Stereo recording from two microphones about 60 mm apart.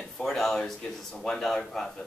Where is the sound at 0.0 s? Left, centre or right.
Centre.